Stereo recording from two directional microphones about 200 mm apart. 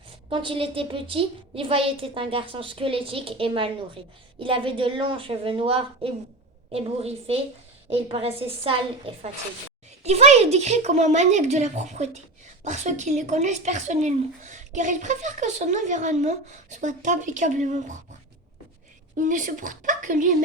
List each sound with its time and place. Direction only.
0.3 s a woman's voice: 25° right (ahead or behind)
10.0 s speech: 30° right (ahead or behind)
19.3 s speech: 40° right (ahead or behind)